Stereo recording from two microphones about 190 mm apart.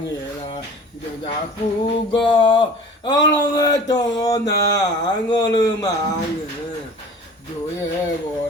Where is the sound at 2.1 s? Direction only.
25° left (ahead or behind).